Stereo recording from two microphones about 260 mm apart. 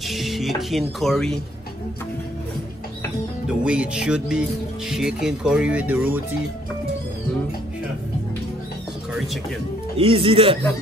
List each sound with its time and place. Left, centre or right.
0.1 s speech: centre
3.4 s speech: centre
9.9 s speech: right